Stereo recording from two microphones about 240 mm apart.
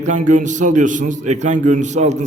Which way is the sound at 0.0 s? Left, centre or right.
Right.